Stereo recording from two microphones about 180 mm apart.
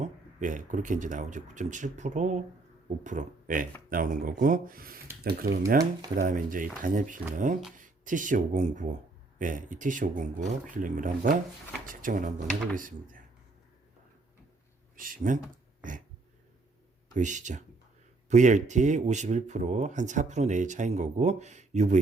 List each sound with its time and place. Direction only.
0.0 s speech: 45° right (ahead or behind)
14.9 s speech: 50° right (ahead or behind)
17.2 s speech: 45° right (ahead or behind)